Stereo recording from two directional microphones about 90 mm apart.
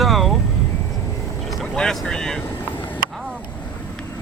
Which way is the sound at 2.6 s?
20° left (ahead or behind).